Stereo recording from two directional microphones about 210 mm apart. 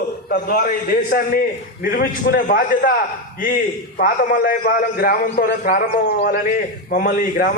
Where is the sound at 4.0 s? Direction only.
45° left (ahead or behind).